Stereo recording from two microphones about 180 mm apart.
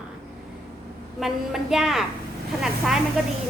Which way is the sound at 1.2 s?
Centre (ahead or behind).